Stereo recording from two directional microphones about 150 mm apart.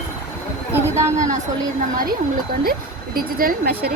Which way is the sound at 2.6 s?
80° right.